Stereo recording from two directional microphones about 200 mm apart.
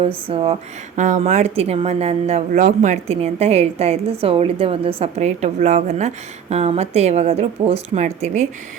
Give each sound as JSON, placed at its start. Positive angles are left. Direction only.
{"t": 0.1, "sound": "speech", "side_deg": -25}
{"t": 0.9, "sound": "speech", "side_deg": -40}